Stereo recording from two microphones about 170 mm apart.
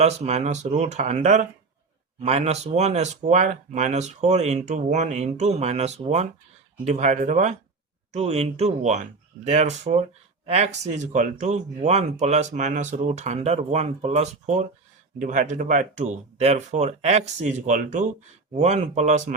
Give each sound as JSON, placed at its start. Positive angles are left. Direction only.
{"t": 0.0, "sound": "speech", "side_deg": -40}